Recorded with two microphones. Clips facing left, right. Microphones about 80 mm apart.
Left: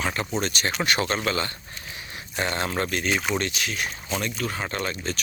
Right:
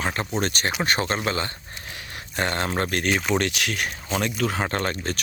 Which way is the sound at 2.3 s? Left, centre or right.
Right.